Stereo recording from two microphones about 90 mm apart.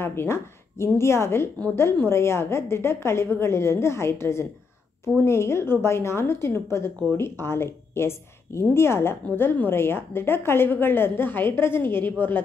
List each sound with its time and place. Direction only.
0.0 s a woman's voice: 25° left (ahead or behind)